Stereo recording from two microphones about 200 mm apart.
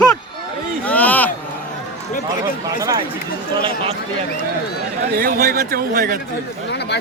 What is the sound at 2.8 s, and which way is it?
Speech, 20° right (ahead or behind).